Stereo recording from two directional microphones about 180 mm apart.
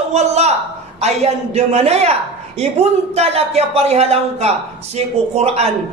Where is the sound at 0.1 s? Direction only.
35° right (ahead or behind).